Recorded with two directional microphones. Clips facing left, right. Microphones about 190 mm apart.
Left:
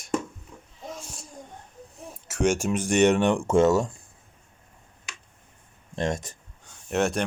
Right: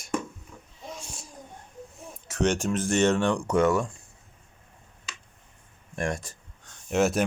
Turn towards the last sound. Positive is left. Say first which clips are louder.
# right 1 dB
turn(degrees=0)  # may be behind; listen again after turning